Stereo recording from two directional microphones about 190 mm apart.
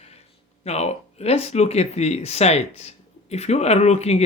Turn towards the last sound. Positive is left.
turn(degrees=35)  # may be behind; listen again after turning